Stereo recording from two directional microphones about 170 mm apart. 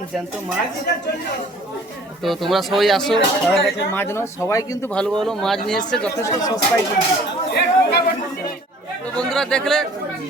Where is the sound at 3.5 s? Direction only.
10° left (ahead or behind).